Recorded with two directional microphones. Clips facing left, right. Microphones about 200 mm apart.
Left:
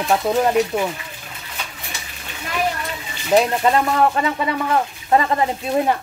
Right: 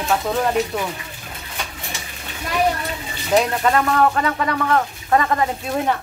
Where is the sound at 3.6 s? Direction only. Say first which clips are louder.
Even; 20° left (ahead or behind).